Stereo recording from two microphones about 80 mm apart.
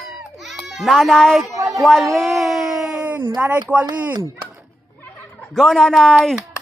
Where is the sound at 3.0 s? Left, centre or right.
Right.